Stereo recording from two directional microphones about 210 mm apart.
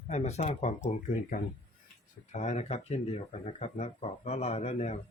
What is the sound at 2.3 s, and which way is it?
Speech, 35° left (ahead or behind).